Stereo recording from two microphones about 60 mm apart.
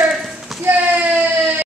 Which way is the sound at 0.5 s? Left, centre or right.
Centre.